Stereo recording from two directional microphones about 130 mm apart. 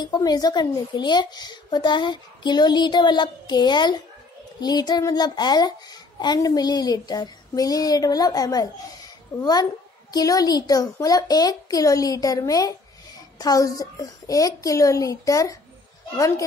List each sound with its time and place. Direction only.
0.0 s a child's voice: 30° left (ahead or behind)